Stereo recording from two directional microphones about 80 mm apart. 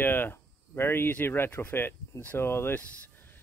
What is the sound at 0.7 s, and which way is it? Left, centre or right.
Speech, left.